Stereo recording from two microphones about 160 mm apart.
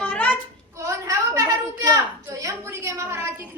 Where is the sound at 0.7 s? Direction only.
20° right (ahead or behind).